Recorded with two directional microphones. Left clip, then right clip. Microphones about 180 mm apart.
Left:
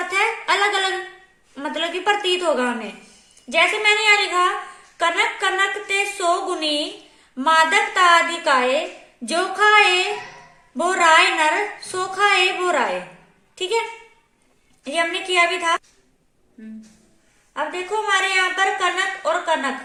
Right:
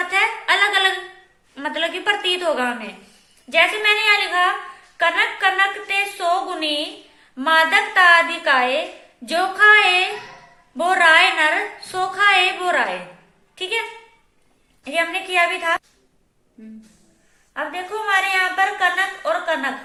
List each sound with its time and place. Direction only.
0.1 s a sound: 70° left (ahead or behind)
1.5 s a woman's voice: 65° left (ahead or behind)
14.8 s speech: 75° left (ahead or behind)
17.5 s speech: 75° left (ahead or behind)